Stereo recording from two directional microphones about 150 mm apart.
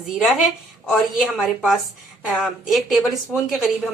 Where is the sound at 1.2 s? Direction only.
Centre (ahead or behind).